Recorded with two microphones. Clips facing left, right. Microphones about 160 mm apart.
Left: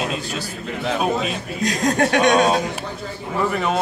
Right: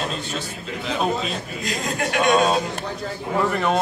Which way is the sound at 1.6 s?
45° left (ahead or behind).